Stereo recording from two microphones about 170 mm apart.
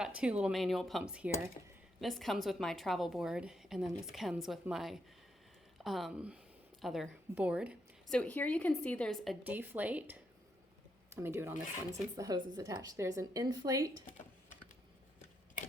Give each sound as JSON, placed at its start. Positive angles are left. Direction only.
{"t": 0.0, "sound": "a woman's voice", "side_deg": -5}
{"t": 1.6, "sound": "speech", "side_deg": 50}
{"t": 2.0, "sound": "a woman's voice", "side_deg": 0}
{"t": 8.1, "sound": "a woman's voice", "side_deg": 10}